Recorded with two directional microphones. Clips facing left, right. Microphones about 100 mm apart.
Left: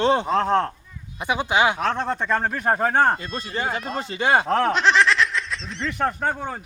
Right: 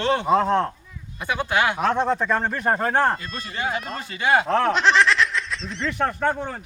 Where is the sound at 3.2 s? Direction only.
35° left (ahead or behind).